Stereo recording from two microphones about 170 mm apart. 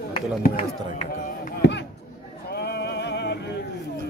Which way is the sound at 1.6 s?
90° left.